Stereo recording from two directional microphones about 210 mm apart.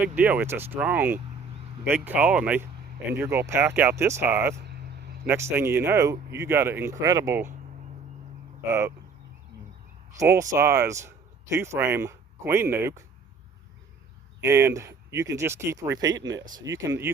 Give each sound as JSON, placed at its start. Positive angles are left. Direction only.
{"t": 0.2, "sound": "speech", "side_deg": -10}
{"t": 4.6, "sound": "a sound", "side_deg": -50}
{"t": 5.2, "sound": "speech", "side_deg": -10}
{"t": 10.2, "sound": "speech", "side_deg": -15}
{"t": 14.4, "sound": "speech", "side_deg": -15}